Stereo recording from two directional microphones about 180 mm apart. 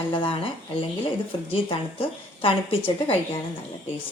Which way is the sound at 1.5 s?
30° left (ahead or behind).